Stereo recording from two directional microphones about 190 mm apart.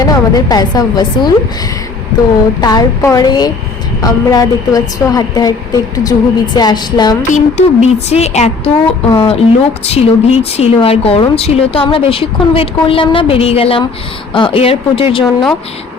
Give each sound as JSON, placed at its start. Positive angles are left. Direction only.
{"t": 0.0, "sound": "a woman's voice", "side_deg": 20}
{"t": 2.6, "sound": "a woman's voice", "side_deg": 20}
{"t": 7.2, "sound": "a woman's voice", "side_deg": 40}